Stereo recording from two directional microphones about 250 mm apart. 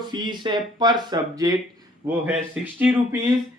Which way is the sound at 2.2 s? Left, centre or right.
Centre.